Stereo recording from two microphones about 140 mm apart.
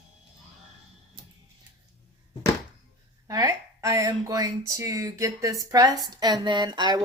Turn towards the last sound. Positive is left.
turn(degrees=-30)  # may be behind; listen again after turning